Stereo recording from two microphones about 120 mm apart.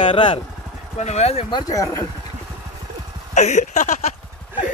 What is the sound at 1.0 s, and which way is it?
Speech, 60° left (ahead or behind).